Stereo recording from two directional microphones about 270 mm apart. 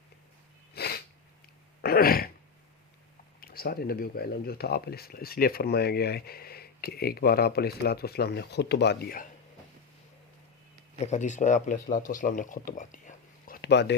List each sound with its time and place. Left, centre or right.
0.7 s sneeze: left
1.8 s throat clearing: left
3.4 s speech: left
11.0 s speech: left